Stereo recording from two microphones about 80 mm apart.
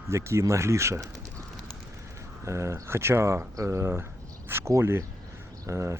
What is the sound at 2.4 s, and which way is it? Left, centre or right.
Speech, right.